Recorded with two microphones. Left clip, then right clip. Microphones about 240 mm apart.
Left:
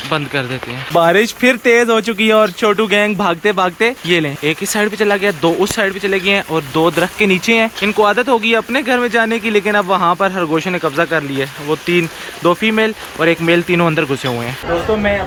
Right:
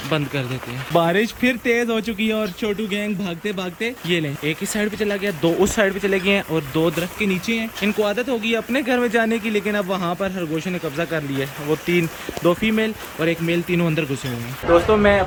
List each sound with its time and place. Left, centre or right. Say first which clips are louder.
0.9 s speech: left 7 dB; centre